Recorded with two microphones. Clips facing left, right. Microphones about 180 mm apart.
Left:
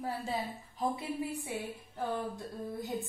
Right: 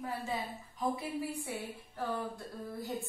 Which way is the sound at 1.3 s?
20° left (ahead or behind).